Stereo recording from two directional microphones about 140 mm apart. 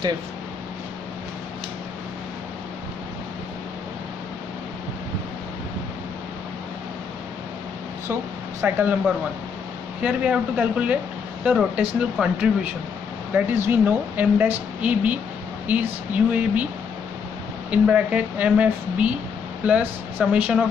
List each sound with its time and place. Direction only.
8.1 s a woman's voice: 15° right (ahead or behind)
17.6 s a woman's voice: 10° right (ahead or behind)